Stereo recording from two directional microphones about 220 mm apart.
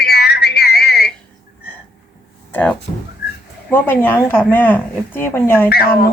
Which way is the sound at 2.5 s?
5° left (ahead or behind).